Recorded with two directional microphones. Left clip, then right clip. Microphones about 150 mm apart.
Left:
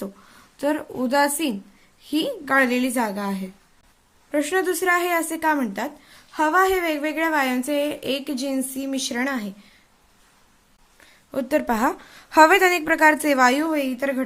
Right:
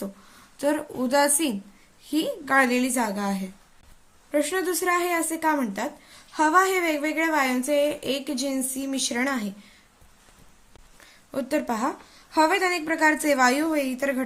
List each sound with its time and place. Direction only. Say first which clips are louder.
0.0 s a woman's voice: left 2 dB; 35° left (ahead or behind)
4.3 s a woman's voice: left 3 dB; 40° left (ahead or behind); by 9.7 s 20° left (ahead or behind)
11.3 s a woman's voice: left 4 dB; 35° left (ahead or behind)